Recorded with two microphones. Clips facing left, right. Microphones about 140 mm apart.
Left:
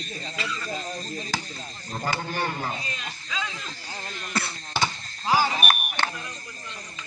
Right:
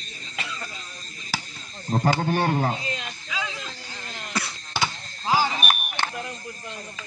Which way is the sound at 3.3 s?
15° right (ahead or behind).